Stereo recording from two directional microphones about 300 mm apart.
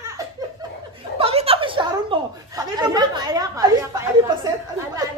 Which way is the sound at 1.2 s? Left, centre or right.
Centre.